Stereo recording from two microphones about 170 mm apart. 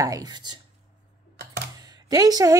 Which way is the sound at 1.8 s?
20° right (ahead or behind).